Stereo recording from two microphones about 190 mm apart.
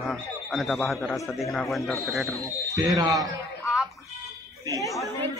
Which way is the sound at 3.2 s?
Centre (ahead or behind).